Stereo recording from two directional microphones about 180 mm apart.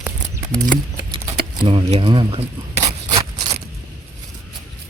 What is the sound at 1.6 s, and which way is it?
Speech, 30° right (ahead or behind).